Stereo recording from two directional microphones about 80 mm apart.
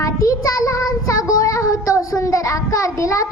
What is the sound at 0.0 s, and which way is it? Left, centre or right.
Child singing, left.